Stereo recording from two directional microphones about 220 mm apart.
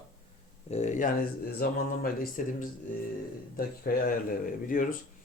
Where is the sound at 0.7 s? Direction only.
30° left (ahead or behind).